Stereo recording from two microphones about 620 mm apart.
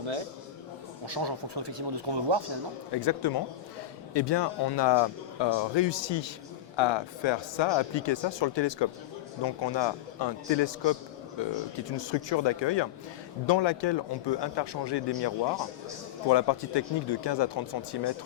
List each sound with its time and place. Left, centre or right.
1.0 s speech: right
2.9 s speech: left
16.3 s speech: left